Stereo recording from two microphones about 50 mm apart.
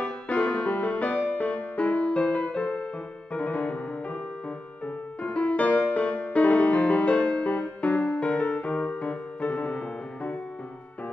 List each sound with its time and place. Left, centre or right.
0.0 s music: left
3.3 s music: left